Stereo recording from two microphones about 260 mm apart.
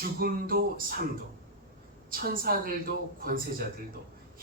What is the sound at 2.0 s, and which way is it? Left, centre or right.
Speech, right.